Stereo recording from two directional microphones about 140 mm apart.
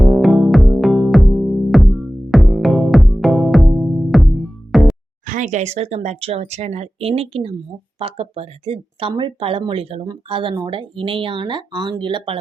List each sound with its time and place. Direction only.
0.0 s music: centre (ahead or behind)
5.2 s speech: 65° right (ahead or behind); by 12.4 s 35° right (ahead or behind)